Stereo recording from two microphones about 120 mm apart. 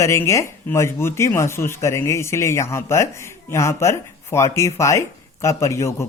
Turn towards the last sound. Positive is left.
turn(degrees=25)  # may be behind; listen again after turning